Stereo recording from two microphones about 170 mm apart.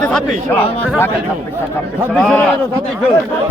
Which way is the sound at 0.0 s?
5° left (ahead or behind).